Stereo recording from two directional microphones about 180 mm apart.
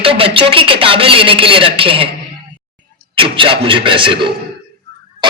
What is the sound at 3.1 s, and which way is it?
Speech, 30° right (ahead or behind).